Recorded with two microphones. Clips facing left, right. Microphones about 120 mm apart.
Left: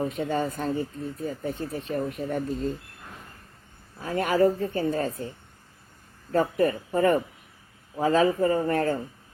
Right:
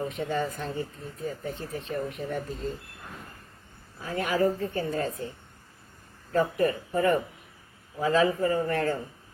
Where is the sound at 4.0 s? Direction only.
45° left (ahead or behind).